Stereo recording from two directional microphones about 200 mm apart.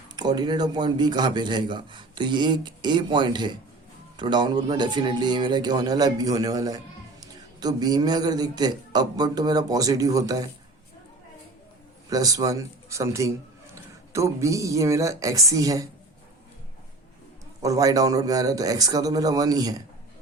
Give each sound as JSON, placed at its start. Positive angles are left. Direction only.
{"t": 0.2, "sound": "a man's voice", "side_deg": -20}
{"t": 12.1, "sound": "a man's voice", "side_deg": -20}
{"t": 17.6, "sound": "a man's voice", "side_deg": -15}